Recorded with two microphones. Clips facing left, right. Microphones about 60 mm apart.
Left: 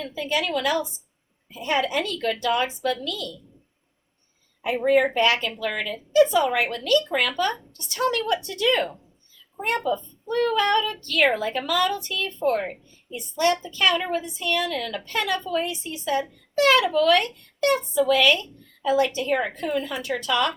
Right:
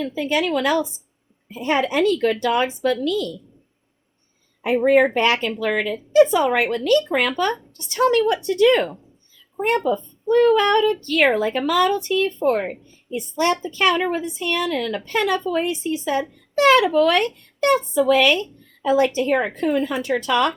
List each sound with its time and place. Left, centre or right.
0.1 s a woman's voice: right
4.6 s a woman's voice: right